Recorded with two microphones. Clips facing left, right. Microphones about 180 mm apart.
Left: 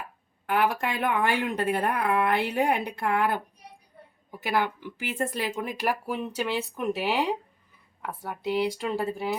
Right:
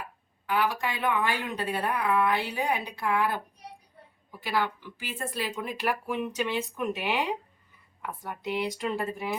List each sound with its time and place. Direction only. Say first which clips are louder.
0.4 s speech: left 3 dB; 55° left (ahead or behind)
5.8 s speech: even; 35° left (ahead or behind)
8.4 s speech: left 3 dB; 35° left (ahead or behind)